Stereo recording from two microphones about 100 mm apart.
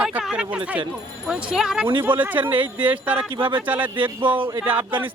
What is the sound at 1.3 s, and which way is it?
Speech, 5° right (ahead or behind).